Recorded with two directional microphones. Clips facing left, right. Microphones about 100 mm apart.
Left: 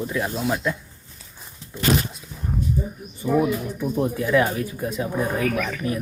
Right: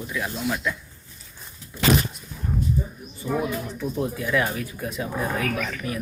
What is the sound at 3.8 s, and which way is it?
Speech, 15° left (ahead or behind).